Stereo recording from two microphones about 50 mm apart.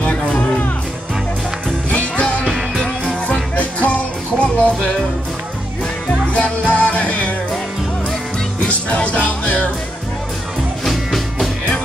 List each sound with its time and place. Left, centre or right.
0.0 s music: left
1.9 s music: left
3.5 s music: left
6.2 s music: left
8.5 s music: left
10.9 s music: centre